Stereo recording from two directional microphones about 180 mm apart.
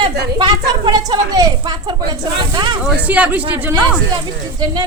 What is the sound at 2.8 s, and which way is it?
Speech, 10° right (ahead or behind).